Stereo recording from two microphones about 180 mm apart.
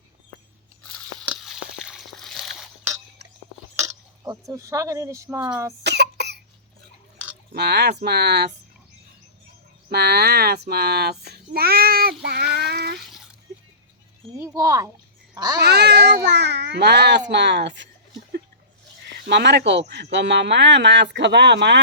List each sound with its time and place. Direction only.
1.3 s a sound: 5° right (ahead or behind)
3.8 s speech: 20° right (ahead or behind)
5.8 s cough: 70° right (ahead or behind)
7.5 s a child's voice: 65° right (ahead or behind)
9.9 s a child's voice: 60° right (ahead or behind)
12.2 s child singing: 65° right (ahead or behind)
14.3 s speech: 15° right (ahead or behind)
15.6 s a child's voice: 65° right (ahead or behind)
19.3 s a child's voice: 70° right (ahead or behind)